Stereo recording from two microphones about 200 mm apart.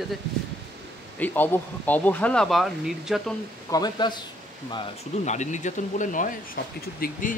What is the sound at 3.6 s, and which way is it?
Speech, 20° left (ahead or behind).